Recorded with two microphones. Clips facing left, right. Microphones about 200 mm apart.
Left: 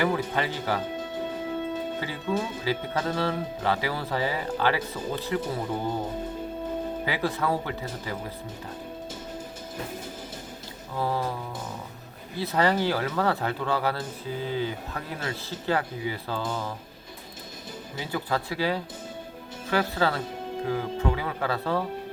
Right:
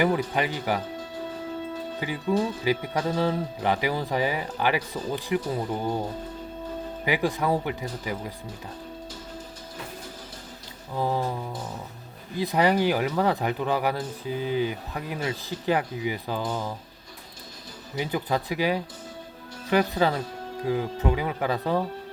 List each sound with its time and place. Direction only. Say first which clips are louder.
0.0 s speech: right 2 dB; 15° right (ahead or behind)
2.3 s speech: right 4 dB; 15° right (ahead or behind)
7.0 s speech: right 5 dB; 15° right (ahead or behind)
10.9 s speech: right 2 dB; 15° right (ahead or behind)
12.4 s speech: right 2 dB; 15° right (ahead or behind)
18.0 s speech: right 2 dB; 15° right (ahead or behind)